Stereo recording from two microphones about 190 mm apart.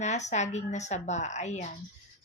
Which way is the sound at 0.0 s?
35° left (ahead or behind).